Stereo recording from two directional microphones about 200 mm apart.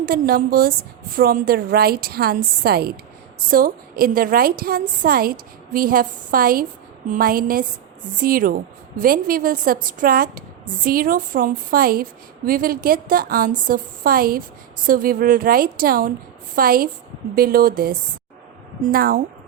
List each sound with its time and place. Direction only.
0.0 s a woman's voice: 45° right (ahead or behind)